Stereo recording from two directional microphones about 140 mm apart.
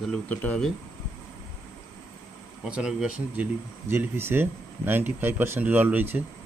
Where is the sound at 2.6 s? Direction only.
5° right (ahead or behind).